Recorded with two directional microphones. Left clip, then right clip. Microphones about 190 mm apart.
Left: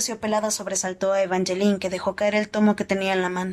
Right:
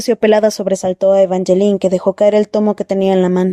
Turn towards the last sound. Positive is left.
turn(degrees=-40)  # may be behind; listen again after turning